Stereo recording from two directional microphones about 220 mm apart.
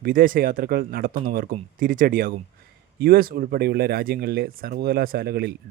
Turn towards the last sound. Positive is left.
turn(degrees=-45)  # may be behind; listen again after turning